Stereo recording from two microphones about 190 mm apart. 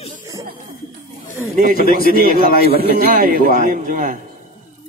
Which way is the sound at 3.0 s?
50° right (ahead or behind).